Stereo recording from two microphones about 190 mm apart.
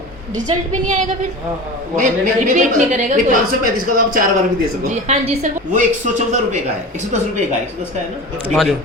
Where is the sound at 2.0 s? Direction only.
40° right (ahead or behind).